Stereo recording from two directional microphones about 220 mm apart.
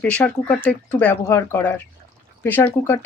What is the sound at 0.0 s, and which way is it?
Speech, 5° left (ahead or behind).